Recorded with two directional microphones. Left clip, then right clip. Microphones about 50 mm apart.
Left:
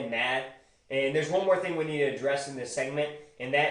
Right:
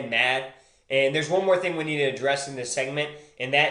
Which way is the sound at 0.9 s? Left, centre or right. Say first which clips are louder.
Right 5 dB; right.